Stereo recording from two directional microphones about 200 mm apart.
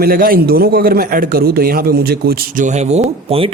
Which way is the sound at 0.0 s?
45° right (ahead or behind).